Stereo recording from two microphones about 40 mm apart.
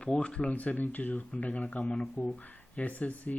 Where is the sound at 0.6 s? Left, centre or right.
Left.